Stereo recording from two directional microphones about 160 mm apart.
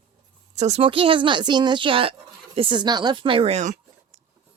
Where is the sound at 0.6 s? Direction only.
40° right (ahead or behind).